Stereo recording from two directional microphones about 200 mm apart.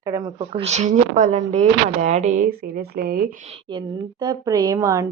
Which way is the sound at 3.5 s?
25° right (ahead or behind).